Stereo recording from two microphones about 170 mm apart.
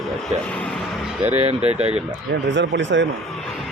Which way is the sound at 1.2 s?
35° right (ahead or behind).